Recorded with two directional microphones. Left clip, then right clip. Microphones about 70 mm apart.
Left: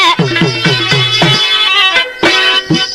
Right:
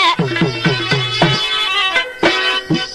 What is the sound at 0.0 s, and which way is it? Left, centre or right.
Music, right.